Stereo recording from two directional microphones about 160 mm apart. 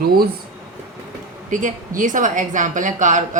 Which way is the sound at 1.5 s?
55° right (ahead or behind).